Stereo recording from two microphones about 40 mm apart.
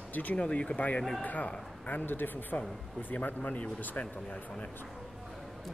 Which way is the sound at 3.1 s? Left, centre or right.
Left.